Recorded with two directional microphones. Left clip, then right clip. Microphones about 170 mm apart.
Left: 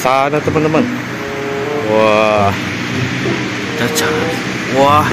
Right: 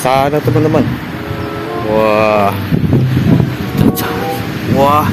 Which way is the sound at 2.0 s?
5° right (ahead or behind).